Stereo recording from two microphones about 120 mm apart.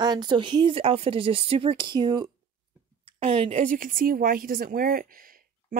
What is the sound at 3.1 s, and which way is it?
Speech, 50° right (ahead or behind).